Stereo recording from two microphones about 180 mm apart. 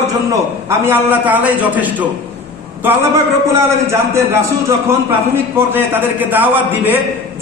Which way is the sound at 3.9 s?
15° right (ahead or behind).